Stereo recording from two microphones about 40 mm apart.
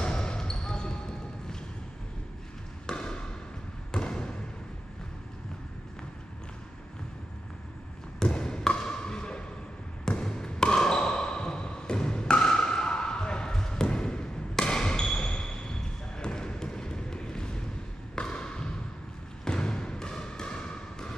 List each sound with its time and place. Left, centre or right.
0.0 s basketball bounce: left
2.9 s basketball bounce: centre
8.2 s basketball bounce: centre
18.1 s a sound: left